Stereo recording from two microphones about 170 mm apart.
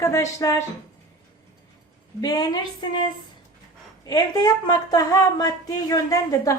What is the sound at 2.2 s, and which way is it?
Speech, 20° left (ahead or behind).